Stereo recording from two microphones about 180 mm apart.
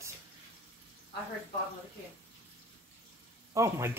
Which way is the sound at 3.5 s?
15° right (ahead or behind).